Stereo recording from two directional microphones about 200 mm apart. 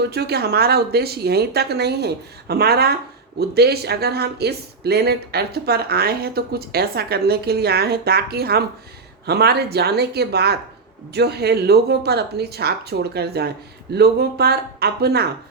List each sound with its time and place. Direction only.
0.1 s speech: 55° right (ahead or behind)